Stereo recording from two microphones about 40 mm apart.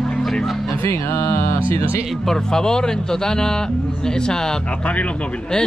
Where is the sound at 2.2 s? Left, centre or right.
Centre.